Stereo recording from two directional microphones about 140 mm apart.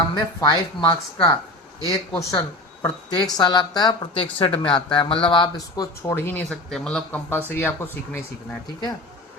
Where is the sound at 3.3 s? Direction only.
30° left (ahead or behind); by 6.6 s 15° left (ahead or behind).